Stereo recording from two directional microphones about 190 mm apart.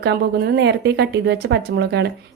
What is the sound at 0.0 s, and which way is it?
Speech, 60° right (ahead or behind).